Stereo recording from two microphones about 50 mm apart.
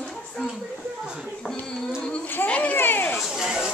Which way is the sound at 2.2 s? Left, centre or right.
Left.